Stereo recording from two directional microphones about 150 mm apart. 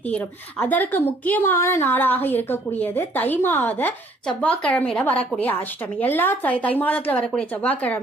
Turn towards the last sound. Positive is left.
turn(degrees=10)  # may be behind; listen again after turning